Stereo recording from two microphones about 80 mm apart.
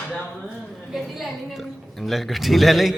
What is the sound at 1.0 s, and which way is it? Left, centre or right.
A woman's voice, centre.